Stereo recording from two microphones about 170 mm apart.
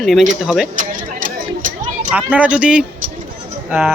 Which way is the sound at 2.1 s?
10° right (ahead or behind).